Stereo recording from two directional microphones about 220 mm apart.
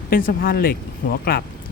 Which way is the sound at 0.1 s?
40° left (ahead or behind).